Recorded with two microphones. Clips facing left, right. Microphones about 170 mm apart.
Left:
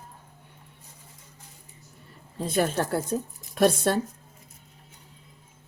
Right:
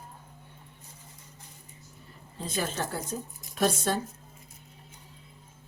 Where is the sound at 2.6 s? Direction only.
60° left (ahead or behind).